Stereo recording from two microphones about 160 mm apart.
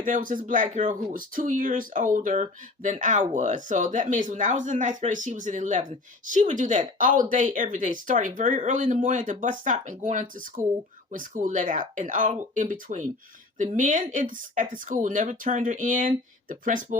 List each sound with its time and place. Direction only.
0.0 s speech: 55° right (ahead or behind)